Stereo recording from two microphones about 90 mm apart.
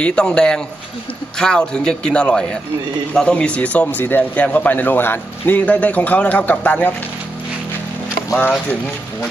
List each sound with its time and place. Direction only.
0.0 s a man's voice: 10° left (ahead or behind)
8.4 s a man's voice: 15° left (ahead or behind)